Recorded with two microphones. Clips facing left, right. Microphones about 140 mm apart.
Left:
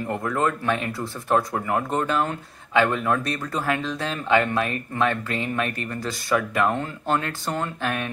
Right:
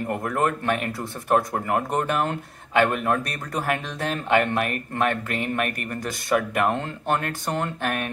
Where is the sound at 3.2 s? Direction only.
50° right (ahead or behind).